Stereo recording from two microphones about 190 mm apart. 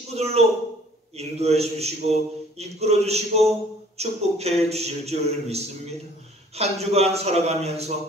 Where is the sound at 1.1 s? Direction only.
35° right (ahead or behind).